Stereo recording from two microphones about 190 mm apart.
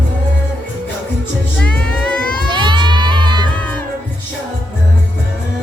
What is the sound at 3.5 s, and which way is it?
Music, 5° left (ahead or behind).